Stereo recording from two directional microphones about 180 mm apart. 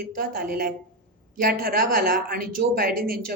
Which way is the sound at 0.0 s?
55° right (ahead or behind).